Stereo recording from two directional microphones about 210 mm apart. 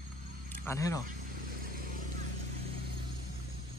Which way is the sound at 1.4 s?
40° right (ahead or behind).